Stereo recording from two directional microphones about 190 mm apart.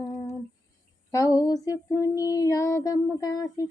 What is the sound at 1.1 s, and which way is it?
Female singing, 15° left (ahead or behind).